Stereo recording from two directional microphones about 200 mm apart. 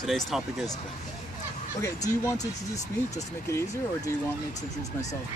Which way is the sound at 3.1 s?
15° left (ahead or behind).